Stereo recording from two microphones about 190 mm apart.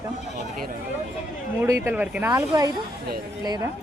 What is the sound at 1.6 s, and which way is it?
Speech, 10° right (ahead or behind).